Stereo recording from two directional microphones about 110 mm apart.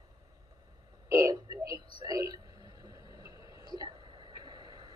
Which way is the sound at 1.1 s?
30° right (ahead or behind).